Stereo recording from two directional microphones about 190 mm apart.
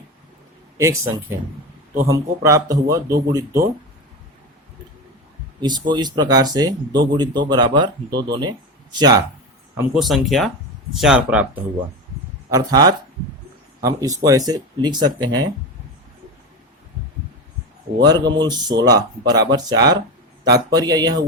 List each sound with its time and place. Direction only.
0.8 s speech: 15° right (ahead or behind)
5.5 s speech: 25° right (ahead or behind)
9.7 s speech: centre (ahead or behind)
12.5 s speech: 20° right (ahead or behind)
18.3 s speech: 20° right (ahead or behind)